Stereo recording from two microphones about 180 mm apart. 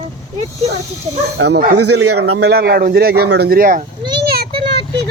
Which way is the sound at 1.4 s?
70° right (ahead or behind).